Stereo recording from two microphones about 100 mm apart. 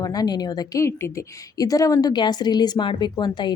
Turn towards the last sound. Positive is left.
turn(degrees=50)  # may be behind; listen again after turning